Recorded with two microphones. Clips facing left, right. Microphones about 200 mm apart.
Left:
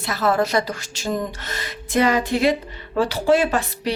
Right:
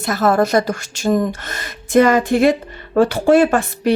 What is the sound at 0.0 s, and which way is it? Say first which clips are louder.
A woman's voice: right 5 dB; 45° right (ahead or behind).